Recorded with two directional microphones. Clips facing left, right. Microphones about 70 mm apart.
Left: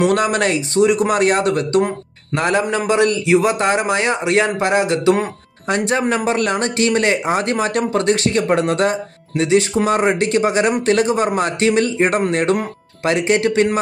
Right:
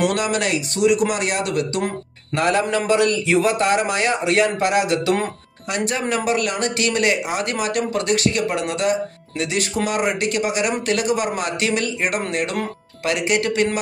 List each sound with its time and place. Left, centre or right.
0.0 s speech: left
2.3 s a man's voice: left